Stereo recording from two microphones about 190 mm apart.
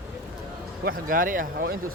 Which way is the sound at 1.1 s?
45° right (ahead or behind).